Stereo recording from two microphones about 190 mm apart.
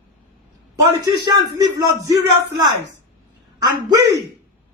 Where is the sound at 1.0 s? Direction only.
20° right (ahead or behind).